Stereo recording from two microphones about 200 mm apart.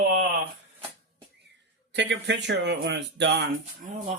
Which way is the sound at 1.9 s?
60° right (ahead or behind).